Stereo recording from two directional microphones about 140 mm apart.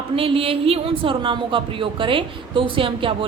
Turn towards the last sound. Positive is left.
turn(degrees=-40)  # may be behind; listen again after turning